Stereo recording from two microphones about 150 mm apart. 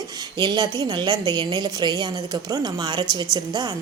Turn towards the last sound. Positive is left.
turn(degrees=-25)  # may be behind; listen again after turning